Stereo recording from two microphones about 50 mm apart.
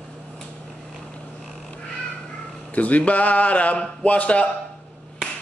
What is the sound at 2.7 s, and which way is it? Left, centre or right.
A man's voice, left.